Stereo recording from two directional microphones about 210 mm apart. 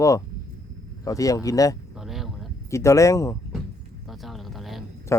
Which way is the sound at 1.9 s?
Centre (ahead or behind).